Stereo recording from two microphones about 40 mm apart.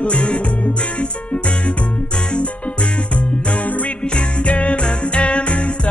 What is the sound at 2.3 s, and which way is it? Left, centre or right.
Music, left.